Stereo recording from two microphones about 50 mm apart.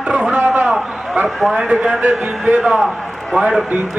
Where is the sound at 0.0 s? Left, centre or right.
Centre.